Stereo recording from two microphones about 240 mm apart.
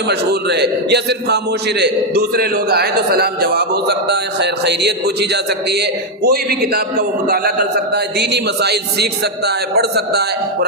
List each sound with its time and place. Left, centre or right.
0.1 s a man's voice: right
7.9 s a man's voice: right